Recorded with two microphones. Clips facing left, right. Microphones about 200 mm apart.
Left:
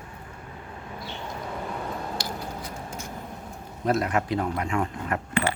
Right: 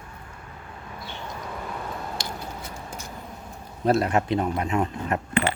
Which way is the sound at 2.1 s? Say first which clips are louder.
Left 1 dB; 25° right (ahead or behind).